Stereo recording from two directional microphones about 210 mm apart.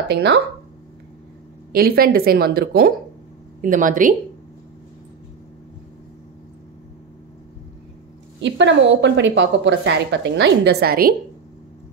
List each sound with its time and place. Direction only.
0.1 s a woman's voice: 50° right (ahead or behind)
1.7 s a woman's voice: 45° right (ahead or behind)
8.4 s a woman's voice: 60° right (ahead or behind)